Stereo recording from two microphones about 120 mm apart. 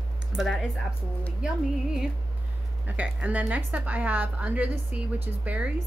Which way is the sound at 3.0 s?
10° right (ahead or behind).